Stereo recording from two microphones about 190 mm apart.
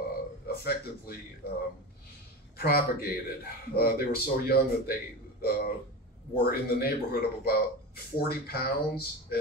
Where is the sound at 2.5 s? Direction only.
55° left (ahead or behind).